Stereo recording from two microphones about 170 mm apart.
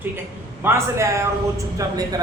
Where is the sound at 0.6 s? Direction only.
15° right (ahead or behind).